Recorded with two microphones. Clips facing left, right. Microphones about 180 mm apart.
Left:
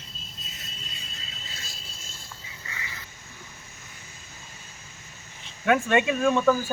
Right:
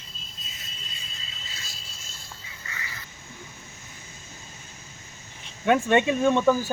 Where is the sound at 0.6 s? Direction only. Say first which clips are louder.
Left 1 dB; 65° left (ahead or behind).